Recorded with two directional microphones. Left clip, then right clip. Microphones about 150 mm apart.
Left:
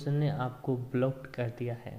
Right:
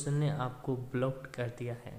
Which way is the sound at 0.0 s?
5° left (ahead or behind).